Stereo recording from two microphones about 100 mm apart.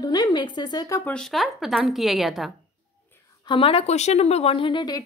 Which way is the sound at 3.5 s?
70° left (ahead or behind).